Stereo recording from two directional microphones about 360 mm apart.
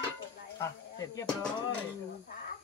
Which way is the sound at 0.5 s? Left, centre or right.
Centre.